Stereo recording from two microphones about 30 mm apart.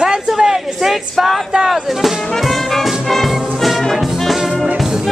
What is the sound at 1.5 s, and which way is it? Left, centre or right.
Speech, centre.